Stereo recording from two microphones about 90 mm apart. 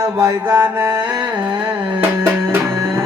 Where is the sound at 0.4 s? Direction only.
25° right (ahead or behind).